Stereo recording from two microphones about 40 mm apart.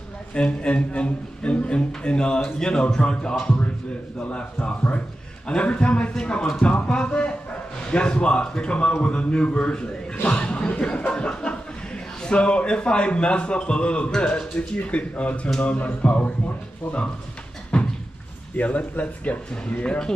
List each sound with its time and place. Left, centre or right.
0.3 s a man's voice: left
4.2 s a man's voice: left
17.7 s a sound: left
18.6 s speech: left
19.5 s a man's voice: left